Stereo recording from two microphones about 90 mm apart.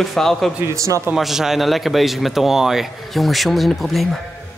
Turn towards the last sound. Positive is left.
turn(degrees=0)  # may be behind; listen again after turning